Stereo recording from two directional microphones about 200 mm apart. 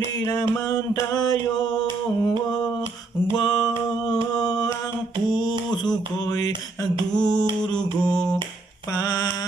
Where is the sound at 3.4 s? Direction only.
20° left (ahead or behind).